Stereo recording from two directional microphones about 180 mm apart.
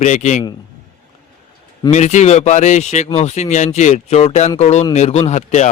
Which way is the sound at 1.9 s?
40° left (ahead or behind).